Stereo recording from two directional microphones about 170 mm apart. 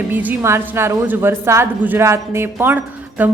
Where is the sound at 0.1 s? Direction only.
10° right (ahead or behind).